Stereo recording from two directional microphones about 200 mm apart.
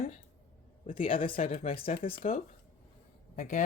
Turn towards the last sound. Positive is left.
turn(degrees=40)  # may be behind; listen again after turning